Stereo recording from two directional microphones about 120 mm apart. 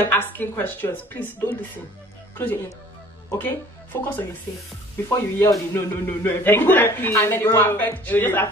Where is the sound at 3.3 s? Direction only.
15° left (ahead or behind).